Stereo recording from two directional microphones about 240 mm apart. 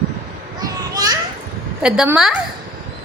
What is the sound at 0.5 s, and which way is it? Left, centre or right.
Children playing, centre.